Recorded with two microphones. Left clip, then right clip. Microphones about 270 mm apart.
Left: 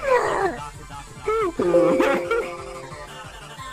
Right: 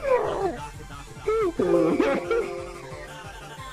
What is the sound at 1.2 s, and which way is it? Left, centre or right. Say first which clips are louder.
Music: left 2 dB; centre.